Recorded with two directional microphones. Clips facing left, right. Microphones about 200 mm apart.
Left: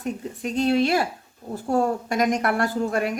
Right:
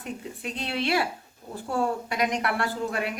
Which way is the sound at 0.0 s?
45° left (ahead or behind).